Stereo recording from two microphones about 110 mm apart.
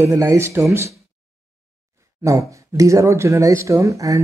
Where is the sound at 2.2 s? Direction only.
30° right (ahead or behind).